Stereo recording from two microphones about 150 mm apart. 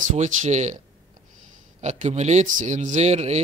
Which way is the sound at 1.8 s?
50° right (ahead or behind).